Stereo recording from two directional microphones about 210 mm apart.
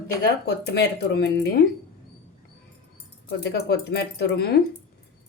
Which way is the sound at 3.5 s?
55° left (ahead or behind).